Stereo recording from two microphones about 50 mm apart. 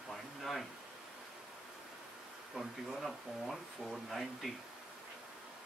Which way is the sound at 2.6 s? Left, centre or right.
Centre.